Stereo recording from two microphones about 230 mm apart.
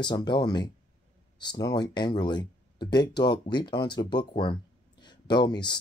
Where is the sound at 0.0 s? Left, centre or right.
Centre.